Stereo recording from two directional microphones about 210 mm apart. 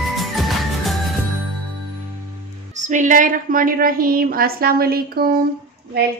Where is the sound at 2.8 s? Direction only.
35° right (ahead or behind).